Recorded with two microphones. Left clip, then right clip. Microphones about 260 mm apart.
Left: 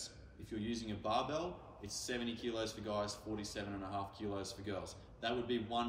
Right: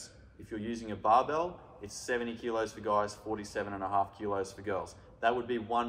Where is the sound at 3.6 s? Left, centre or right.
Right.